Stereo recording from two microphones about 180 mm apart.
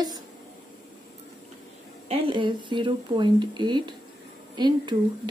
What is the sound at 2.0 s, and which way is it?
A woman's voice, 30° right (ahead or behind).